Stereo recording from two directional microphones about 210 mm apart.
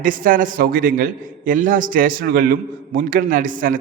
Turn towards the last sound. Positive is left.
turn(degrees=-40)  # may be behind; listen again after turning